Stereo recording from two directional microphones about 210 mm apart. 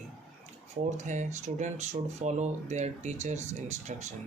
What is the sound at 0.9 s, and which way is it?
Speech, 35° right (ahead or behind).